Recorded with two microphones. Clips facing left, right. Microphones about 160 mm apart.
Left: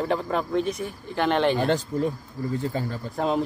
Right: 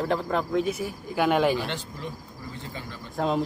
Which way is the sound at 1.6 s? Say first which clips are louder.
Left 9 dB; 40° left (ahead or behind).